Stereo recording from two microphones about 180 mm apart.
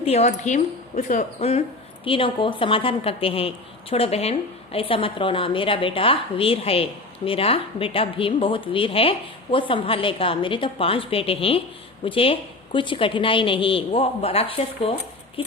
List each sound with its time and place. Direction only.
0.0 s a woman's voice: 35° left (ahead or behind)